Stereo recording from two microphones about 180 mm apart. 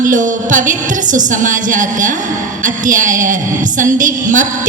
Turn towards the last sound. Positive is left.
turn(degrees=-45)  # may be behind; listen again after turning